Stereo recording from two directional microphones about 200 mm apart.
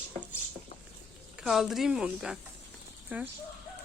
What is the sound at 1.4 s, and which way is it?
Speech, centre (ahead or behind).